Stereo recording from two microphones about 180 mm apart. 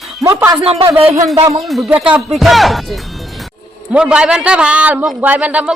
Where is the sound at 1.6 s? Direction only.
Centre (ahead or behind).